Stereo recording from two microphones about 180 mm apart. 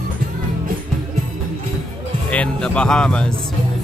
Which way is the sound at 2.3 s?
5° left (ahead or behind).